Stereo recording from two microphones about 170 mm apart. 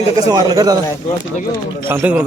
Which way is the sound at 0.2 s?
25° right (ahead or behind).